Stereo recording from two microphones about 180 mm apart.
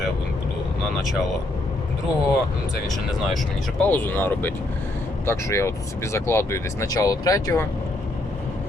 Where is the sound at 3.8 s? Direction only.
10° left (ahead or behind).